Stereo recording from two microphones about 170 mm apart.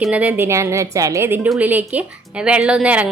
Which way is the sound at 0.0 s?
10° right (ahead or behind).